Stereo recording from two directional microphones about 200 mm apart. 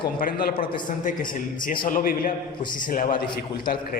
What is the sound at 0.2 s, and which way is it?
Speech, 45° left (ahead or behind).